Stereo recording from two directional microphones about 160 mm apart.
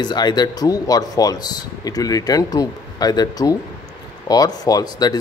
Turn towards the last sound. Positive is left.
turn(degrees=25)  # may be behind; listen again after turning